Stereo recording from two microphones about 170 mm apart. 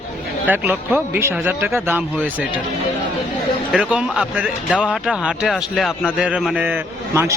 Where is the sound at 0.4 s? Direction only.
10° right (ahead or behind).